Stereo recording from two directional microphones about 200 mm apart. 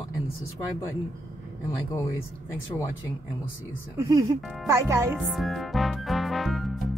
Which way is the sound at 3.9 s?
20° right (ahead or behind).